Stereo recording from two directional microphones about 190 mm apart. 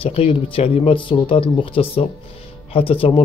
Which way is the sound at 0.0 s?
30° left (ahead or behind).